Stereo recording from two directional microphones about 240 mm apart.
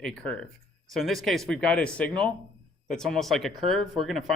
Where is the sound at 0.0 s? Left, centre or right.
Centre.